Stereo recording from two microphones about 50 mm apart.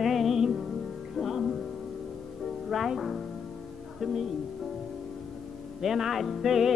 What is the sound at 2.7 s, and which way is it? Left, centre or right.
Music, centre.